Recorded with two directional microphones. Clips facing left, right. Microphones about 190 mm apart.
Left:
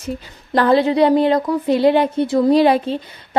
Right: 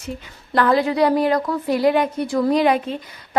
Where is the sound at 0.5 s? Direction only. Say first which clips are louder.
Left 3 dB; 30° left (ahead or behind).